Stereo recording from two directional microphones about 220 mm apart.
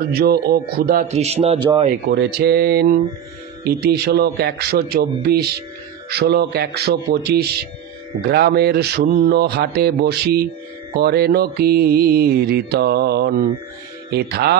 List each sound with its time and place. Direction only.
0.1 s speech: 45° right (ahead or behind); by 1.7 s 25° right (ahead or behind)
2.0 s mantra: 45° right (ahead or behind)